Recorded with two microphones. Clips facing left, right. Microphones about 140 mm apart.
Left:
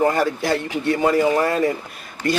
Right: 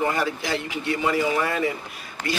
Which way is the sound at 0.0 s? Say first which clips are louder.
Left 6 dB; 45° left (ahead or behind).